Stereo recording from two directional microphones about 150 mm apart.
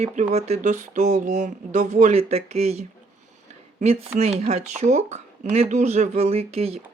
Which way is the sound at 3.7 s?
45° right (ahead or behind).